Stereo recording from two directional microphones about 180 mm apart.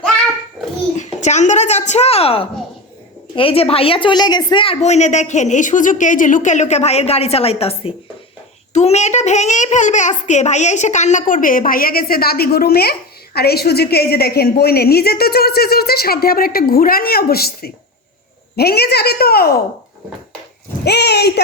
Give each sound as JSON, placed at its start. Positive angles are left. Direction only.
{"t": 0.9, "sound": "a woman's voice", "side_deg": 40}
{"t": 20.8, "sound": "speech", "side_deg": 65}